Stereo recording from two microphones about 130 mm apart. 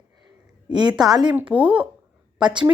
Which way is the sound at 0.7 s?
35° right (ahead or behind).